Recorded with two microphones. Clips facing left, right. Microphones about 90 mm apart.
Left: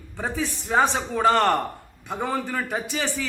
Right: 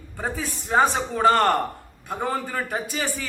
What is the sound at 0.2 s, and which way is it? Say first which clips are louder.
A man's voice: left 1 dB; 5° right (ahead or behind).